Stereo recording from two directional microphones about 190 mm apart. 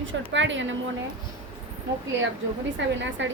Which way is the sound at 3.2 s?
70° right (ahead or behind).